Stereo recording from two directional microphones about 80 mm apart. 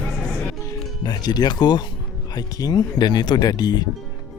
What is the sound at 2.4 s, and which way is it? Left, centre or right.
Speech, left.